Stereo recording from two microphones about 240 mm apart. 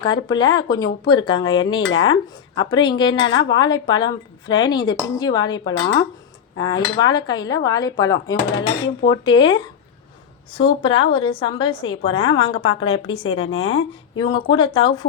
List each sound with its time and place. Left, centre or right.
0.0 s cutlery: centre
1.0 s a woman's voice: centre
3.5 s cutlery: centre
10.5 s a woman's voice: left